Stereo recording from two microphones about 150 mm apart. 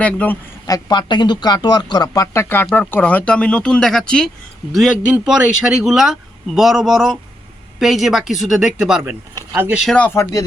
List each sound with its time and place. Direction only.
0.0 s speech: 10° left (ahead or behind)
0.7 s speech: 30° left (ahead or behind); by 9.1 s 5° right (ahead or behind)
9.8 s speech: 5° left (ahead or behind)